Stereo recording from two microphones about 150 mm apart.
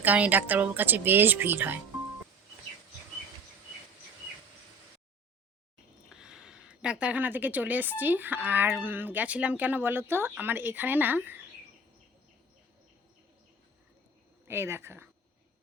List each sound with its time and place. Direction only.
0.0 s speech: 10° right (ahead or behind)
6.1 s speech: 5° right (ahead or behind)
14.4 s speech: 15° right (ahead or behind)